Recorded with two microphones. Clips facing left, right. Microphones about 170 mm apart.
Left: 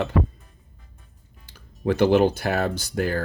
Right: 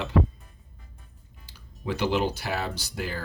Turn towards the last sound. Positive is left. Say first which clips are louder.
# left 9 dB
turn(degrees=50)  # may be behind; listen again after turning